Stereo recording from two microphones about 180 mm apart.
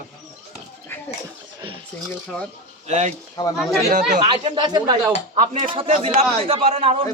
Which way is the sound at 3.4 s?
20° left (ahead or behind).